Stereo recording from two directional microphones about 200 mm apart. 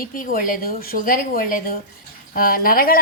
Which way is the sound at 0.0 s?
45° left (ahead or behind).